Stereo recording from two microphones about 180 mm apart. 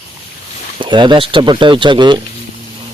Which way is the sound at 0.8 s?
25° right (ahead or behind).